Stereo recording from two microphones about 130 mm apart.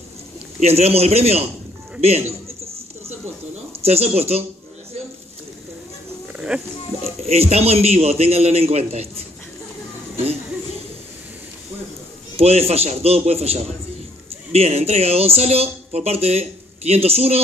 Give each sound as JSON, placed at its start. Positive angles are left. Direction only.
{"t": 0.6, "sound": "speech", "side_deg": -55}
{"t": 2.0, "sound": "a sound", "side_deg": -55}
{"t": 3.8, "sound": "speech", "side_deg": -50}
{"t": 6.4, "sound": "speech", "side_deg": -5}
{"t": 7.2, "sound": "speech", "side_deg": -55}
{"t": 12.4, "sound": "speech", "side_deg": -50}